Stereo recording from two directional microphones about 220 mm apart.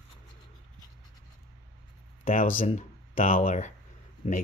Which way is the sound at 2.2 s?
40° left (ahead or behind).